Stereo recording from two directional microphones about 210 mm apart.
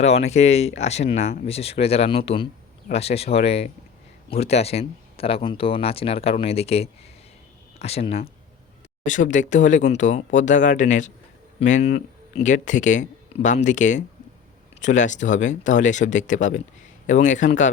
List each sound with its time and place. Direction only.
0.0 s speech: 30° left (ahead or behind)